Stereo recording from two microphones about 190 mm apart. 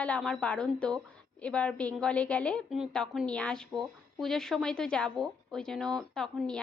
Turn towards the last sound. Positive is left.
turn(degrees=5)  # may be behind; listen again after turning